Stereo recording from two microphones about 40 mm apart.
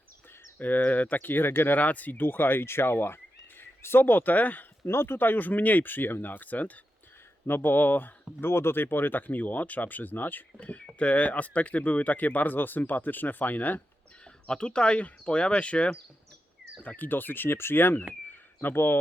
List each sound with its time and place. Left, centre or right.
0.6 s speech: left
1.7 s speech: left
4.9 s speech: left
7.4 s speech: left
8.4 s speech: left
14.4 s speech: left
17.0 s speech: left
18.3 s a sound: left